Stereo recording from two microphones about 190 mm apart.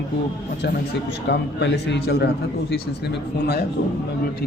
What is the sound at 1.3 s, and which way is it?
A man's voice, 65° left (ahead or behind).